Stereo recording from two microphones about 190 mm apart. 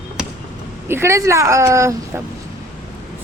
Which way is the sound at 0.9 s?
15° right (ahead or behind).